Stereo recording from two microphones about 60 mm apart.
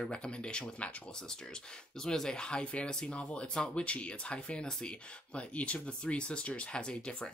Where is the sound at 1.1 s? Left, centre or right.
Centre.